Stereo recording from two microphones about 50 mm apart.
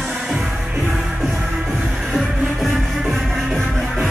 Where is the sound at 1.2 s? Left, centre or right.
Centre.